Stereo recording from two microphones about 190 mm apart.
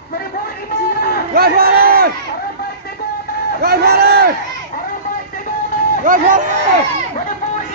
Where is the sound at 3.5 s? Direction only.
55° right (ahead or behind).